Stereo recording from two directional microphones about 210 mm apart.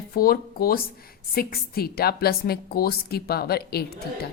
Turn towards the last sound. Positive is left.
turn(degrees=50)  # may be behind; listen again after turning